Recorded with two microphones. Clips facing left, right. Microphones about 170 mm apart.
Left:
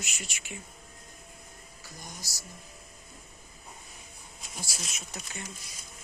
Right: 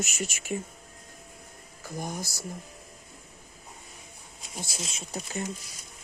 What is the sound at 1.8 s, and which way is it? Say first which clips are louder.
Speech: right 13 dB; 55° right (ahead or behind).